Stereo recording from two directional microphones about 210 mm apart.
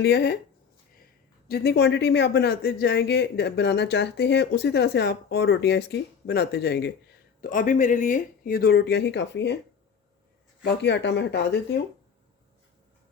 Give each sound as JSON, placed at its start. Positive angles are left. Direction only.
{"t": 0.0, "sound": "speech", "side_deg": 50}
{"t": 1.5, "sound": "speech", "side_deg": 50}
{"t": 7.4, "sound": "speech", "side_deg": 40}
{"t": 10.6, "sound": "speech", "side_deg": 55}